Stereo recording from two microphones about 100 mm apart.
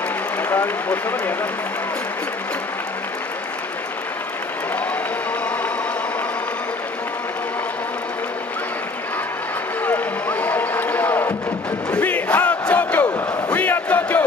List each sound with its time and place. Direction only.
0.4 s speech: 20° left (ahead or behind)
9.8 s a sound: 15° left (ahead or behind)
11.9 s crowd: 15° left (ahead or behind)